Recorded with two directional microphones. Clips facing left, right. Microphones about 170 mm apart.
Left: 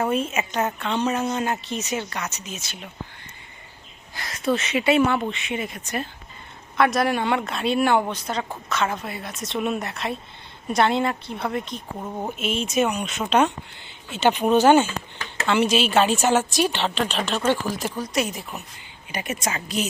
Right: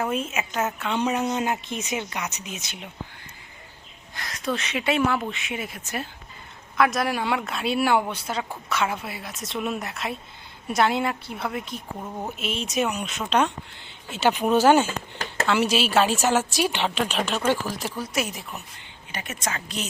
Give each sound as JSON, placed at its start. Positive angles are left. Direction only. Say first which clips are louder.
{"t": 0.0, "sound": "speech", "louder": "left 3 dB", "side_deg": 0}
{"t": 4.1, "sound": "a woman's voice", "louder": "left 5 dB", "side_deg": 0}
{"t": 11.9, "sound": "a woman's voice", "louder": "left 4 dB", "side_deg": 10}
{"t": 14.8, "sound": "speech", "louder": "right 1 dB", "side_deg": -40}
{"t": 15.4, "sound": "a woman's voice", "louder": "left 3 dB", "side_deg": 0}
{"t": 19.1, "sound": "speech", "louder": "left 4 dB", "side_deg": 10}